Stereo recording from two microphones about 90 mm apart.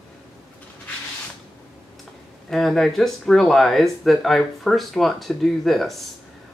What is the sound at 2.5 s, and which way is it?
Speech, 5° left (ahead or behind).